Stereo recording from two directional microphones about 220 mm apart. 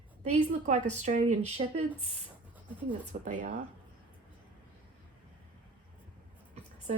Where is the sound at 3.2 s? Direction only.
35° right (ahead or behind).